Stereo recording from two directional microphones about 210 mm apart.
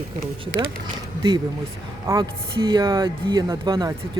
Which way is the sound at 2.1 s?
15° right (ahead or behind).